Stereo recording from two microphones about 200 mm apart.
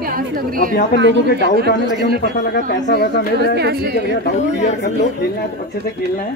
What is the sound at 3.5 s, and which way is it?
Speech, 55° right (ahead or behind).